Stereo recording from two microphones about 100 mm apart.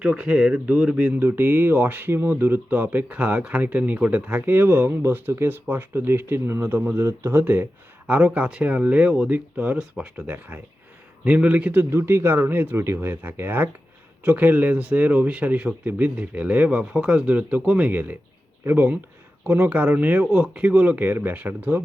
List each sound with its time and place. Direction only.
0.0 s speech: 10° right (ahead or behind)
10.2 s speech: 20° right (ahead or behind)